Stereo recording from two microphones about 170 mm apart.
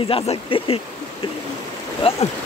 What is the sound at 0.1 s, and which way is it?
Speech, 30° left (ahead or behind).